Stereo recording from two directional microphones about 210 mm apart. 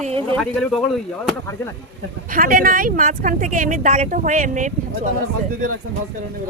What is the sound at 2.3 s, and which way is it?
Speech, 40° right (ahead or behind).